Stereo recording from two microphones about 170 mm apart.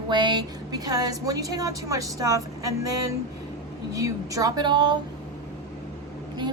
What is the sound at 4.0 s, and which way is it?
A woman's voice, 20° right (ahead or behind).